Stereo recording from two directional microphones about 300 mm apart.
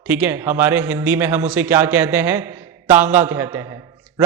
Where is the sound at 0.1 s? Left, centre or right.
Centre.